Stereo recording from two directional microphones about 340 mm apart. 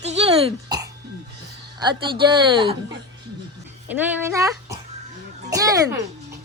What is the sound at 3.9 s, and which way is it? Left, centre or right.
A child's voice, centre.